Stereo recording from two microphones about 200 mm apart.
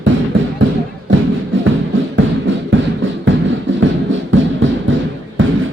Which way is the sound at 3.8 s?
70° right (ahead or behind).